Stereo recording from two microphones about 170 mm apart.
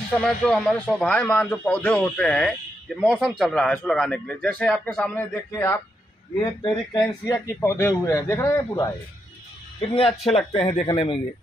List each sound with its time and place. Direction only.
0.2 s a man's voice: 5° left (ahead or behind)
6.6 s speech: 25° left (ahead or behind)
7.2 s speech: 15° left (ahead or behind)
9.8 s speech: 35° left (ahead or behind)